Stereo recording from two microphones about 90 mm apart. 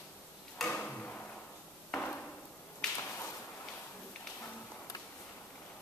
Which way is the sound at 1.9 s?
15° left (ahead or behind).